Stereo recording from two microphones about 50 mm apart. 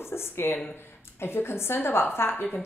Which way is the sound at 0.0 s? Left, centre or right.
Left.